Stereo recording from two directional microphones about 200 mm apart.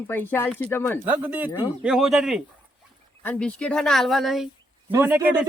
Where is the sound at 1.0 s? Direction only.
10° right (ahead or behind).